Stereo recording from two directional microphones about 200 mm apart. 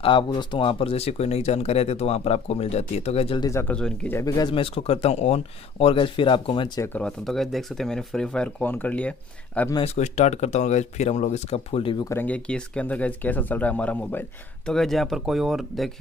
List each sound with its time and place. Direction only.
0.0 s speech: 25° left (ahead or behind)
3.4 s speech: 10° left (ahead or behind)
6.9 s speech: 5° left (ahead or behind)
9.8 s speech: 35° left (ahead or behind)
12.1 s speech: 10° left (ahead or behind)